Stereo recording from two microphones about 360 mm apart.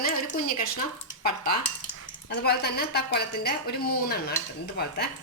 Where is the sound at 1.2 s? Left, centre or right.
Left.